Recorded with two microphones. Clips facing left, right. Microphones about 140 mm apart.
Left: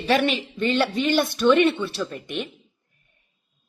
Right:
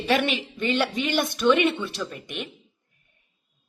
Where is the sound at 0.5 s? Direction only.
10° right (ahead or behind).